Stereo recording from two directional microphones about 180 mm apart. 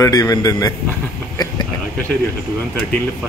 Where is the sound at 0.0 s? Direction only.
20° left (ahead or behind).